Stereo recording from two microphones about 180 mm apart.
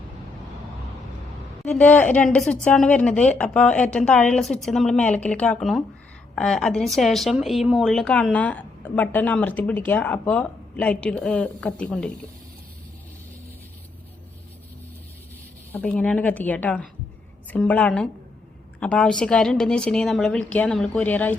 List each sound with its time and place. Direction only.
1.6 s a woman's voice: 10° left (ahead or behind)
15.7 s a woman's voice: 5° left (ahead or behind)